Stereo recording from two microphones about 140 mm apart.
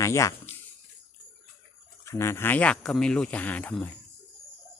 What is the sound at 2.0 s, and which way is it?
Speech, 20° left (ahead or behind).